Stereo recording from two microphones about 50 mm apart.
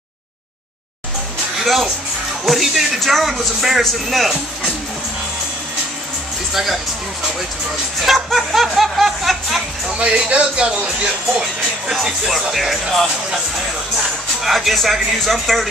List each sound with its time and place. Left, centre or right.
1.6 s speech: centre
6.5 s speech: centre
8.0 s speech: centre
9.8 s speech: centre
11.9 s speech: centre
14.4 s speech: centre